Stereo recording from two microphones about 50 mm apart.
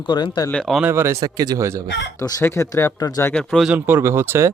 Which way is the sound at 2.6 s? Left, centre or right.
Left.